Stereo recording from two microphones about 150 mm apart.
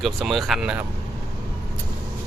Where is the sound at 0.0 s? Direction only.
Centre (ahead or behind).